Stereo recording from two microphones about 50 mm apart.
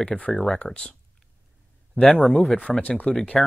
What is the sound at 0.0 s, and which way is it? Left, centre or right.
Speech, left.